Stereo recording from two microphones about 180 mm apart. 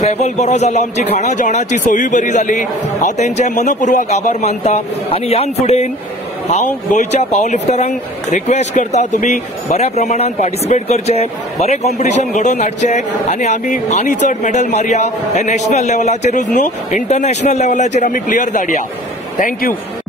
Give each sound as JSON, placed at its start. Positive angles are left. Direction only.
{"t": 0.0, "sound": "a man's voice", "side_deg": 35}